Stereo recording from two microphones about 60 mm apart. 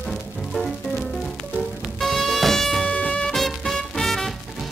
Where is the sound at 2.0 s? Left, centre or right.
Centre.